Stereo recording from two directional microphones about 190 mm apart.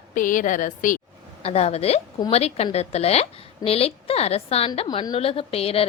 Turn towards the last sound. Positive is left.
turn(degrees=30)  # may be behind; listen again after turning